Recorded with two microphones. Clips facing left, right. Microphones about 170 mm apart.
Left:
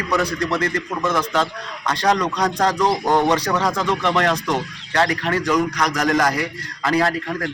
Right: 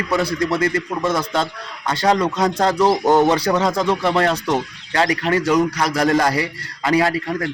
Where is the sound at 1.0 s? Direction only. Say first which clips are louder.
Left 1 dB; 35° right (ahead or behind).